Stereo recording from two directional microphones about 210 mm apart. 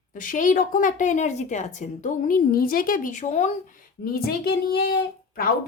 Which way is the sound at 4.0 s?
45° left (ahead or behind).